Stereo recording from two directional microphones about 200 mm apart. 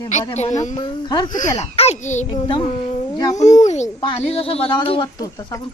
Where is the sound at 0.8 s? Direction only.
20° left (ahead or behind).